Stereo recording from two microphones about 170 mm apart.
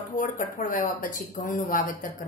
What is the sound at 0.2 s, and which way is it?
A woman's voice, 50° left (ahead or behind).